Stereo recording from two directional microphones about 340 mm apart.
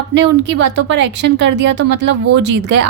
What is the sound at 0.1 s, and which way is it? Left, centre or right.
A woman's voice, right.